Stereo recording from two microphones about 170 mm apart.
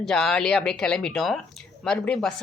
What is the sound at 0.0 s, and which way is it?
A man's voice, centre (ahead or behind).